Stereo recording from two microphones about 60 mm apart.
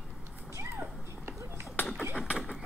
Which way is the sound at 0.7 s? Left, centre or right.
Right.